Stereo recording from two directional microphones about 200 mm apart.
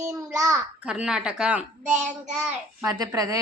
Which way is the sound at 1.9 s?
35° right (ahead or behind).